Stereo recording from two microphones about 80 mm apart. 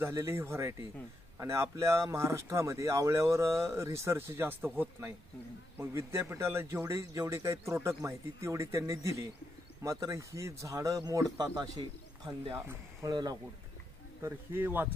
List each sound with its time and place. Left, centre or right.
0.0 s speech: right
13.1 s speech: right
14.2 s speech: right